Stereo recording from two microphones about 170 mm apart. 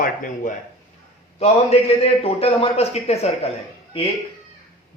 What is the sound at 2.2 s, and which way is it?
A man's voice, 35° left (ahead or behind).